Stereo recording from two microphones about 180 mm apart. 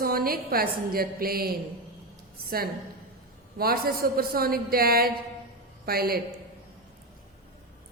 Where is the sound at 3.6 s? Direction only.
55° right (ahead or behind).